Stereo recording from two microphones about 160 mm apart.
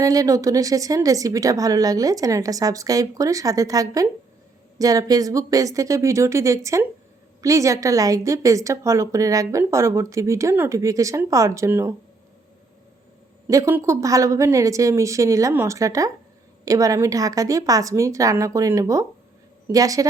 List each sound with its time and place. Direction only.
0.0 s a woman's voice: 20° right (ahead or behind)
13.5 s a woman's voice: 20° right (ahead or behind)